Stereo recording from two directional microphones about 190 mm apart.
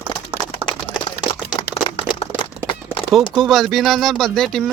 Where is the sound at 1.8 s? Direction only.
30° left (ahead or behind).